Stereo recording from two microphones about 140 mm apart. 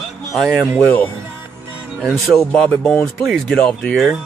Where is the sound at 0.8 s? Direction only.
15° left (ahead or behind).